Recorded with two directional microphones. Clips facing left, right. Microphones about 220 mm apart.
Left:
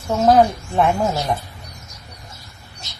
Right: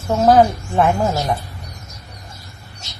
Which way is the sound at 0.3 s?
Centre (ahead or behind).